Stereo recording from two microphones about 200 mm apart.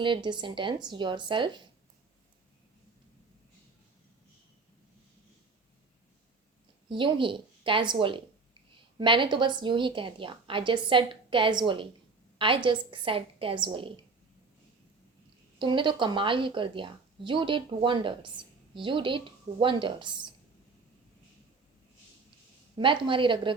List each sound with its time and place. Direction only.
0.0 s a woman's voice: 25° right (ahead or behind)
6.8 s a woman's voice: 25° right (ahead or behind)
15.5 s a woman's voice: 25° right (ahead or behind)
22.8 s a woman's voice: 25° right (ahead or behind)